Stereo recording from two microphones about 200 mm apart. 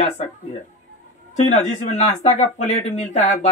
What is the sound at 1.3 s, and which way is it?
Speech, 35° left (ahead or behind).